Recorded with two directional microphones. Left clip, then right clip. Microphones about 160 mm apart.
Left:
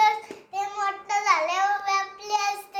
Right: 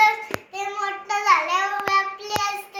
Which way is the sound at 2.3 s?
10° left (ahead or behind).